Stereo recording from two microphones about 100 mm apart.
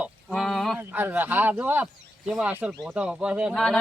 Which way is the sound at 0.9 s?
20° right (ahead or behind).